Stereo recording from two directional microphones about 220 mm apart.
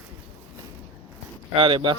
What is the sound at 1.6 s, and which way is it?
Speech, 25° right (ahead or behind).